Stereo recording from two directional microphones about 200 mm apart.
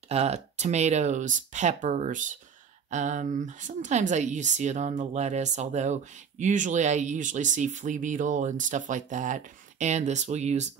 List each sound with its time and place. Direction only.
0.1 s speech: 35° right (ahead or behind)